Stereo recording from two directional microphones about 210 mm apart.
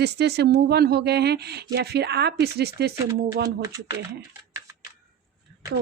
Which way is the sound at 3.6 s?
15° right (ahead or behind).